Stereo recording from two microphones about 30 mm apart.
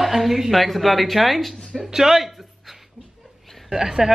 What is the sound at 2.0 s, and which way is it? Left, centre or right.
Speech, centre.